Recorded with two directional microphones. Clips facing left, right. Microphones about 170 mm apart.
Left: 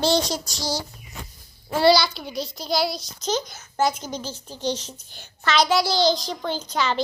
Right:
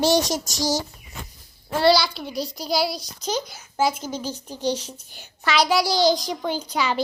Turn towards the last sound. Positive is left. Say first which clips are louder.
# even
turn(degrees=-10)  # may be behind; listen again after turning